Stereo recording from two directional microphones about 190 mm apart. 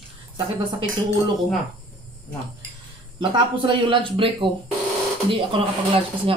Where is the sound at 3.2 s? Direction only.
25° right (ahead or behind).